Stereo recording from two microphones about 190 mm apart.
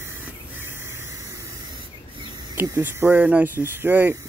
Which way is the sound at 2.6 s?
10° right (ahead or behind).